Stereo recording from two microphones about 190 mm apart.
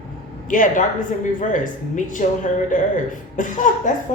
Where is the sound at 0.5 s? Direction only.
45° left (ahead or behind).